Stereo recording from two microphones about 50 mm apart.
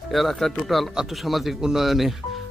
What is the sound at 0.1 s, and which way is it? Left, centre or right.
Speech, centre.